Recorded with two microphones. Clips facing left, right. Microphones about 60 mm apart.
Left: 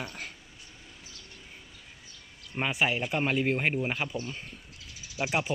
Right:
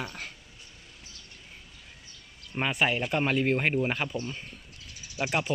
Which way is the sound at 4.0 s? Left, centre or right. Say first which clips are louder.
Right 1 dB; centre.